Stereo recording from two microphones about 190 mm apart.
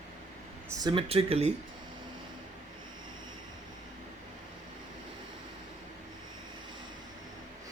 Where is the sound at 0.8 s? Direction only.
25° right (ahead or behind).